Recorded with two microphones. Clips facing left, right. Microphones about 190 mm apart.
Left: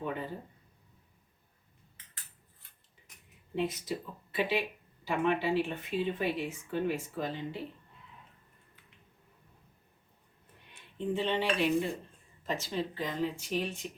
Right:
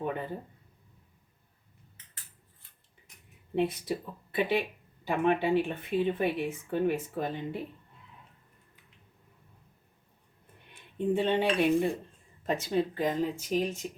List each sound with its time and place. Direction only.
3.5 s speech: 60° right (ahead or behind)
10.9 s speech: 55° right (ahead or behind)